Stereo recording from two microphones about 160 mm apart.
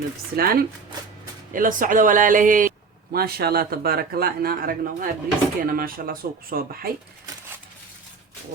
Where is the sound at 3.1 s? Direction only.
75° right (ahead or behind).